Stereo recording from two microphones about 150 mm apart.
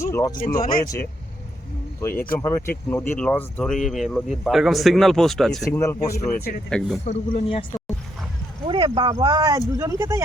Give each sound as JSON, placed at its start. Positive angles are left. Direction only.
{"t": 0.0, "sound": "speech", "side_deg": 20}
{"t": 2.0, "sound": "speech", "side_deg": 15}
{"t": 5.8, "sound": "speech", "side_deg": 20}
{"t": 6.3, "sound": "speech", "side_deg": 80}
{"t": 6.7, "sound": "speech", "side_deg": 5}
{"t": 7.0, "sound": "speech", "side_deg": 45}
{"t": 8.6, "sound": "speech", "side_deg": -30}